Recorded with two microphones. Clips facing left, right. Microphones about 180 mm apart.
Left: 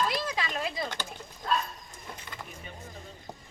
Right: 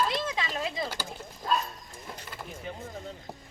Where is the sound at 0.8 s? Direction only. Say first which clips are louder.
Right 1 dB; 5° right (ahead or behind).